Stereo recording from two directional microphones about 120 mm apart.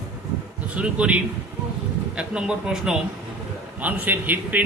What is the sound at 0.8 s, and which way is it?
A man's voice, 10° right (ahead or behind).